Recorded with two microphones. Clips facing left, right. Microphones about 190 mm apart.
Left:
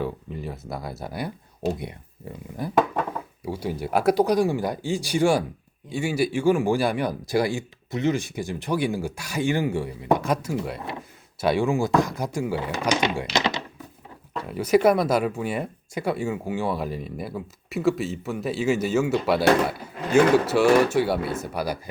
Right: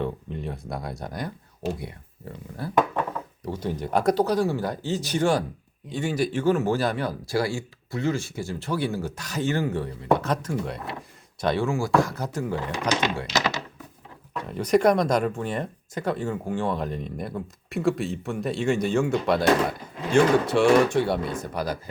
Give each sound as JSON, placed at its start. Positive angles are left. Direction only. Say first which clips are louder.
{"t": 0.0, "sound": "speech", "louder": "even", "side_deg": 5}
{"t": 2.6, "sound": "speech", "louder": "left 1 dB", "side_deg": 15}
{"t": 14.4, "sound": "speech", "louder": "left 1 dB", "side_deg": 5}